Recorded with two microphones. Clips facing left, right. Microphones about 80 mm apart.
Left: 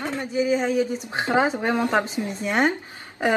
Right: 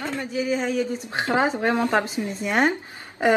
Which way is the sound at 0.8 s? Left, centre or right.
Centre.